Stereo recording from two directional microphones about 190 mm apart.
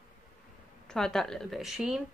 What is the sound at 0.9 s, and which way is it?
A woman's voice, 5° left (ahead or behind).